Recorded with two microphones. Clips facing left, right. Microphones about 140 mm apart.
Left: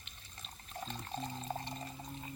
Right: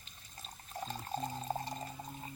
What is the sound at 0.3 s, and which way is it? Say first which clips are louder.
Water: right 2 dB; 35° right (ahead or behind).